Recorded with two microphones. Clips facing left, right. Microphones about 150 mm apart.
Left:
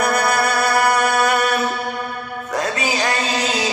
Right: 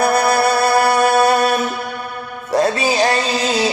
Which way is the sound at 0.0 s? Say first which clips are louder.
Right 4 dB; 30° right (ahead or behind).